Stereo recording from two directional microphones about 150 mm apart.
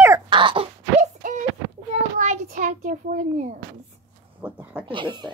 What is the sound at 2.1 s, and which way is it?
A child's voice, 55° right (ahead or behind).